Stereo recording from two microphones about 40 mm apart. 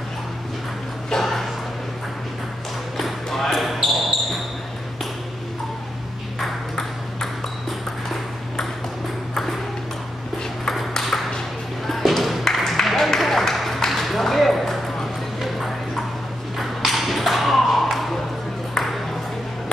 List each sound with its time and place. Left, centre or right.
1.1 s a sound: centre
3.0 s basketball bounce: centre
10.7 s ping: centre
11.9 s music: centre
13.8 s a sound: centre
16.5 s thump: centre
18.8 s ping: centre